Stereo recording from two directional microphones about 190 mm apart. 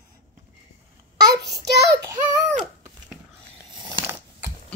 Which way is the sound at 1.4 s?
60° right (ahead or behind).